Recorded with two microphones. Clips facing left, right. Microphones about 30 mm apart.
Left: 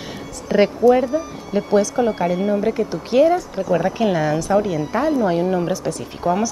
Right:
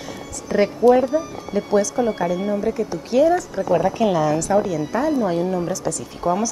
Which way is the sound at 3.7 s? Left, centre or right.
Centre.